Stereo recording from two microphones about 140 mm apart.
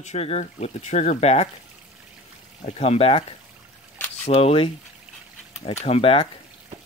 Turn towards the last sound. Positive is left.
turn(degrees=40)  # may be behind; listen again after turning